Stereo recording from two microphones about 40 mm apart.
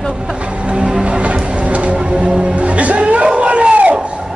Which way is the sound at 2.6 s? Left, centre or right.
Right.